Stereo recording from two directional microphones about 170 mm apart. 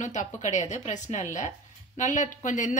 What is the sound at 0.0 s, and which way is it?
A woman's voice, 45° left (ahead or behind).